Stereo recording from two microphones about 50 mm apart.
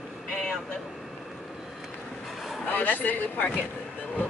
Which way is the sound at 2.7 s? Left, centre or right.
Left.